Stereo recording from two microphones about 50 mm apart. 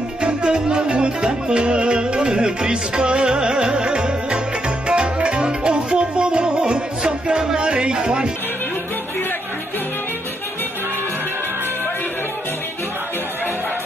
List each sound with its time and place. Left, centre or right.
0.2 s music: centre